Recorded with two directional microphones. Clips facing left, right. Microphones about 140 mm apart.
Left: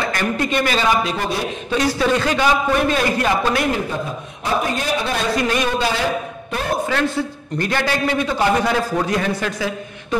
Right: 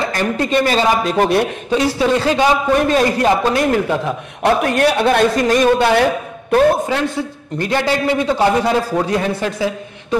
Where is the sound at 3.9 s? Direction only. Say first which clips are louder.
Right 6 dB; 75° right (ahead or behind).